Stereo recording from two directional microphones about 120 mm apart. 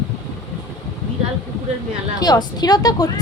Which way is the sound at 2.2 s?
35° left (ahead or behind).